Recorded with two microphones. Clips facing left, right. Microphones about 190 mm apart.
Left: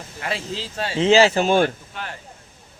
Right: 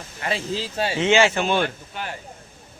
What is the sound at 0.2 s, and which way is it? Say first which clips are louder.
Speech: right 2 dB; centre (ahead or behind).